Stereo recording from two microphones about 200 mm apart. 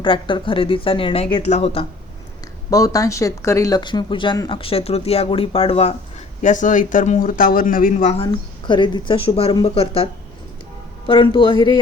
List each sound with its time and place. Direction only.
0.0 s speech: 25° left (ahead or behind)
2.6 s speech: 15° left (ahead or behind)